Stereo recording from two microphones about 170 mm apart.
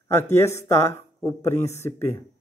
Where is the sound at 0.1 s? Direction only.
15° left (ahead or behind).